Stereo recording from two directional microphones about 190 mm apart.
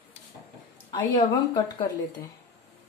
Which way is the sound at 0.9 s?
20° left (ahead or behind).